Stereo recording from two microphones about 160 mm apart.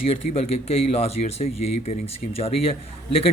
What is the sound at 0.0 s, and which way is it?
Speech, 40° left (ahead or behind).